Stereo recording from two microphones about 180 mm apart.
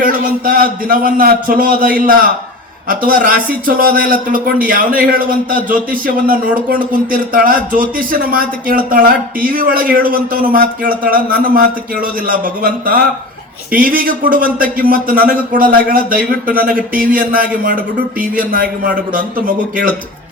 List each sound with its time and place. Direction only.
0.0 s a man's voice: 55° right (ahead or behind)